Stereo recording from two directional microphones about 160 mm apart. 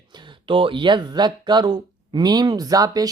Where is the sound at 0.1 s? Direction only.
30° right (ahead or behind).